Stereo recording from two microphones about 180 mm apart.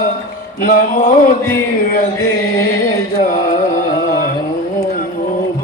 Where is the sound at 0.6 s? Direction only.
45° left (ahead or behind).